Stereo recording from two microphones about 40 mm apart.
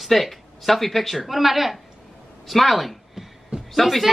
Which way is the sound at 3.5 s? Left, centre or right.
Right.